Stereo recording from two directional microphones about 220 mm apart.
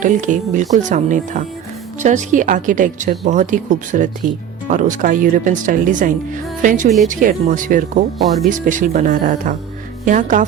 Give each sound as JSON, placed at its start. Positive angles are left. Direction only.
{"t": 0.0, "sound": "a woman's voice", "side_deg": -35}